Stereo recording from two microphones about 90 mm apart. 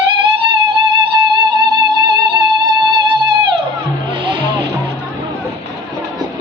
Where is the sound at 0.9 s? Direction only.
60° right (ahead or behind).